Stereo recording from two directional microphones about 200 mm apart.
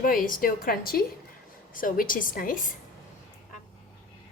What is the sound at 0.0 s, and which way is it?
A woman's voice, 45° left (ahead or behind).